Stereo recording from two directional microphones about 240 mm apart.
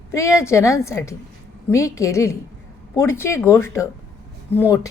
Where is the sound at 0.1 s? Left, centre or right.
Centre.